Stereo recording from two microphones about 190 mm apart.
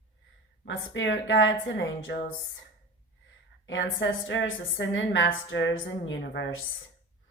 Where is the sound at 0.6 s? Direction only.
75° left (ahead or behind).